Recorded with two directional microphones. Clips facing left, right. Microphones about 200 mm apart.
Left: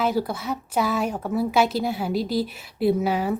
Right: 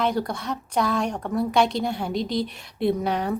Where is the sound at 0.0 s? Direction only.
5° left (ahead or behind).